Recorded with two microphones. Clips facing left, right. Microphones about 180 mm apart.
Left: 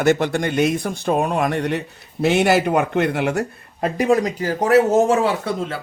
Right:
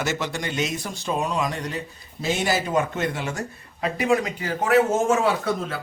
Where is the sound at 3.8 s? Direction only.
40° left (ahead or behind).